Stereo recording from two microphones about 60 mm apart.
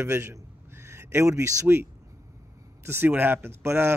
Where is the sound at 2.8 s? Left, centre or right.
Right.